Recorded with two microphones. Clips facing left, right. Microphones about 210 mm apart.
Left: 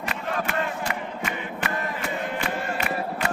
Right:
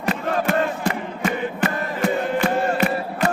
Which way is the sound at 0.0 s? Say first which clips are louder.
Right 7 dB; 35° right (ahead or behind).